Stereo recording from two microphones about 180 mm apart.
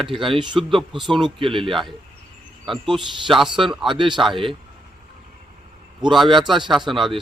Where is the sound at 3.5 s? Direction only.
25° right (ahead or behind).